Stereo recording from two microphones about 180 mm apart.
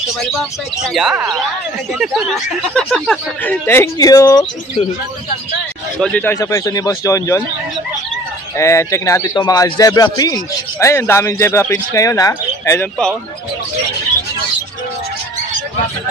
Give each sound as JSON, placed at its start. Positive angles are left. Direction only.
{"t": 0.8, "sound": "speech", "side_deg": -5}
{"t": 2.7, "sound": "speech", "side_deg": 5}
{"t": 5.9, "sound": "speech", "side_deg": 5}
{"t": 6.3, "sound": "speech", "side_deg": 20}
{"t": 8.5, "sound": "speech", "side_deg": 15}